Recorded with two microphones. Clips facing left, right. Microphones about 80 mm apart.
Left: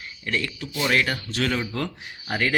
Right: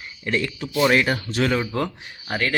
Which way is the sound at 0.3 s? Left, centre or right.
Centre.